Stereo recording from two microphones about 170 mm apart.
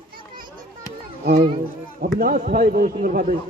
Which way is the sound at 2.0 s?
55° right (ahead or behind).